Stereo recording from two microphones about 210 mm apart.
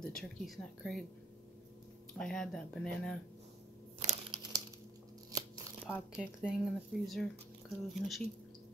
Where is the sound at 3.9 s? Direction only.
30° right (ahead or behind).